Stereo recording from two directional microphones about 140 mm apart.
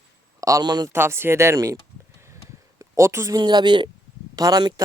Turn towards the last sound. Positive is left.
turn(degrees=-30)  # may be behind; listen again after turning